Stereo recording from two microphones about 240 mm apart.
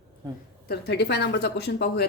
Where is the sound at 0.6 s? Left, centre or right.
Left.